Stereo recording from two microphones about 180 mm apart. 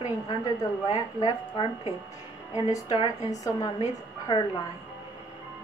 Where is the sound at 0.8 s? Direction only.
25° left (ahead or behind).